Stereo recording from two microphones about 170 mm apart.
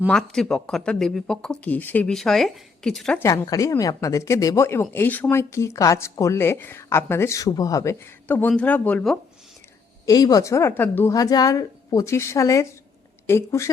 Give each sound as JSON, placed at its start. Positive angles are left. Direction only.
{"t": 0.1, "sound": "speech", "side_deg": 5}
{"t": 3.2, "sound": "a woman's voice", "side_deg": 20}
{"t": 10.1, "sound": "a woman's voice", "side_deg": 20}